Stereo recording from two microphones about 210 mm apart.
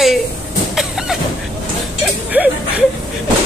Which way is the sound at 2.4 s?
5° right (ahead or behind).